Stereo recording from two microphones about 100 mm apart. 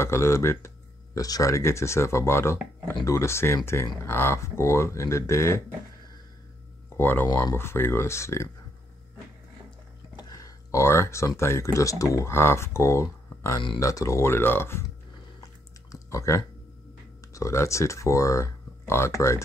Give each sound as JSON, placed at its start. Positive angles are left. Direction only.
{"t": 0.0, "sound": "speech", "side_deg": 30}
{"t": 7.0, "sound": "speech", "side_deg": 20}
{"t": 10.1, "sound": "speech", "side_deg": 40}
{"t": 15.9, "sound": "speech", "side_deg": 30}